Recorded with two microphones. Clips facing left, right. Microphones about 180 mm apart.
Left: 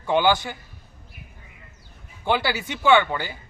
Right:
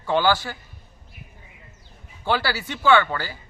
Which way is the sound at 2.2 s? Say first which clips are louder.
Left 1 dB; 20° left (ahead or behind).